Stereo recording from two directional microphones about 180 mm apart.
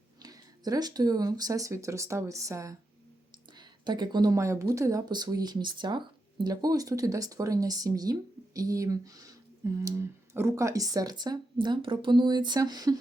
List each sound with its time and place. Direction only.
0.2 s speech: 20° right (ahead or behind)